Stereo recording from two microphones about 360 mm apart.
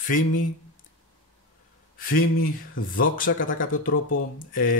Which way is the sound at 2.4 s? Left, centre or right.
Left.